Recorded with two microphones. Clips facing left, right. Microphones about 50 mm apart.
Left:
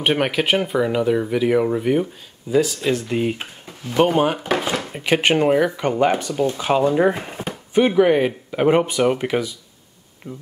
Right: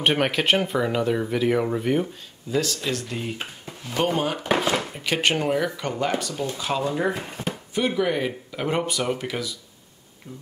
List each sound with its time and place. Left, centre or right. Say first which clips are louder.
0.0 s speech: left 2 dB; centre
5.8 s speech: left 7 dB; left
7.7 s speech: left 9 dB; left